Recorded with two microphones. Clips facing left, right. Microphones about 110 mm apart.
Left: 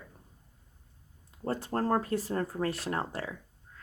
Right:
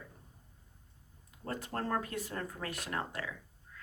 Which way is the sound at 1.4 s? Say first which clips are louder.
Left 7 dB; 35° left (ahead or behind).